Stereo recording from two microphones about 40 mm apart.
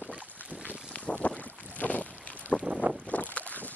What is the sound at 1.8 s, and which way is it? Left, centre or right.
Boat, left.